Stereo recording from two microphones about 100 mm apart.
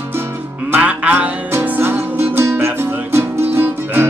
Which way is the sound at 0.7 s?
15° right (ahead or behind).